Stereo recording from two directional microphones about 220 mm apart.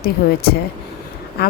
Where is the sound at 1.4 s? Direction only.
45° left (ahead or behind).